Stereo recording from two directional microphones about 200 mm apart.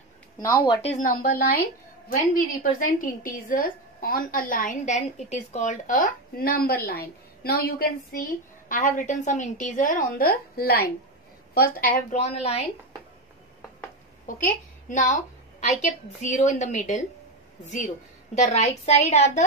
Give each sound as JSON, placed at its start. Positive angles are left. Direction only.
{"t": 0.8, "sound": "a woman's voice", "side_deg": 40}
{"t": 14.2, "sound": "a woman's voice", "side_deg": 40}